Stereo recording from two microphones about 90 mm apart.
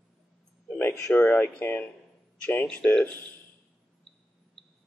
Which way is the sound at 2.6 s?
10° left (ahead or behind).